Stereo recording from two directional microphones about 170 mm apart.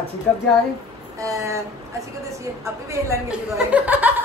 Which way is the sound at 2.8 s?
15° right (ahead or behind).